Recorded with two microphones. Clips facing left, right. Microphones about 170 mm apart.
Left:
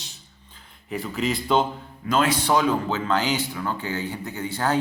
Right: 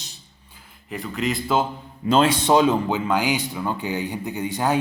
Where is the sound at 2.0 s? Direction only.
30° right (ahead or behind).